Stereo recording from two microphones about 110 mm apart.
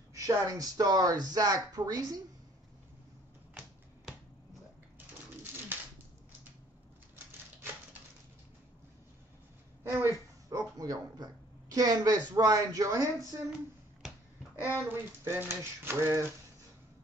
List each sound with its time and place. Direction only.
0.1 s speech: 30° right (ahead or behind)
9.8 s speech: 20° right (ahead or behind)
10.5 s a sound: 35° right (ahead or behind)
11.7 s speech: 35° right (ahead or behind)
14.6 s speech: 20° right (ahead or behind)